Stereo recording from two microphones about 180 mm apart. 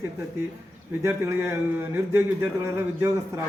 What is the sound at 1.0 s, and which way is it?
Speech, 15° right (ahead or behind).